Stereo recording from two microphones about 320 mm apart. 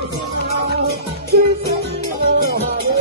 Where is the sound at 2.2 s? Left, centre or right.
Right.